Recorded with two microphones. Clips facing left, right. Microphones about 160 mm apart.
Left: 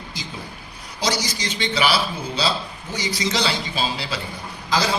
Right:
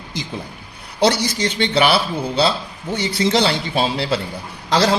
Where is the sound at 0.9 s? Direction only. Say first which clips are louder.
Right 8 dB; 60° right (ahead or behind).